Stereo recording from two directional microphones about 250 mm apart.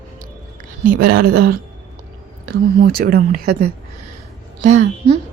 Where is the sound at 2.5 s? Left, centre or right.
Right.